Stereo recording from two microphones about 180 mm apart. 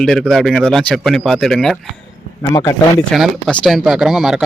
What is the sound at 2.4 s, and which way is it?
Speech, 20° left (ahead or behind).